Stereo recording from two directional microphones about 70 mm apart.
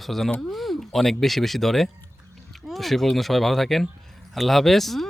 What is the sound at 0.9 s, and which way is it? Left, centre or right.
Speech, centre.